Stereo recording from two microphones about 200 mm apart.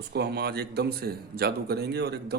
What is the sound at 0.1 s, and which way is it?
Speech, 55° right (ahead or behind).